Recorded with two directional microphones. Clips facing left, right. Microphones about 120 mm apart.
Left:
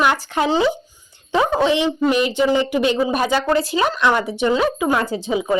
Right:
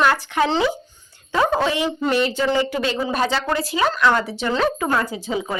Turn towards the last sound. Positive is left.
turn(degrees=20)  # may be behind; listen again after turning